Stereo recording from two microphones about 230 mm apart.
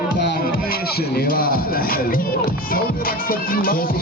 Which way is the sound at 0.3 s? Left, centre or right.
Left.